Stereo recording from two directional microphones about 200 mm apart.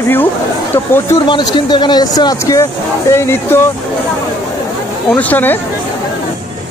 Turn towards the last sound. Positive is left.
turn(degrees=10)  # may be behind; listen again after turning